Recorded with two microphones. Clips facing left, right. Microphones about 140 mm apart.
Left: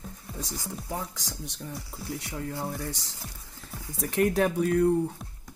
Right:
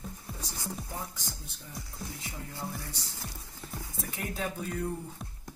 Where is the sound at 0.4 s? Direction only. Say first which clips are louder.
Left 4 dB; 90° left.